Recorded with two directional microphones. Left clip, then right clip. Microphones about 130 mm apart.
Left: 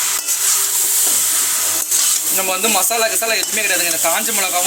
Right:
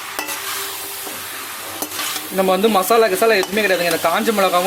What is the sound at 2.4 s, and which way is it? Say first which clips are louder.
Sizzle: right 5 dB; 90° right.